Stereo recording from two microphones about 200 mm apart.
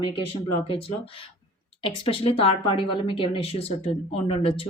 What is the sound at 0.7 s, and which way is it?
Speech, 30° left (ahead or behind).